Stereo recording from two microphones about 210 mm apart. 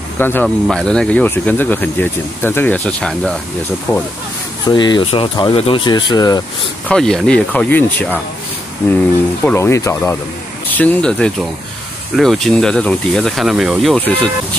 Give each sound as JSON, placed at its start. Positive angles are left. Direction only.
{"t": 0.2, "sound": "speech", "side_deg": 10}
{"t": 4.6, "sound": "speech", "side_deg": 20}
{"t": 6.9, "sound": "speech", "side_deg": 0}
{"t": 9.4, "sound": "speech", "side_deg": 10}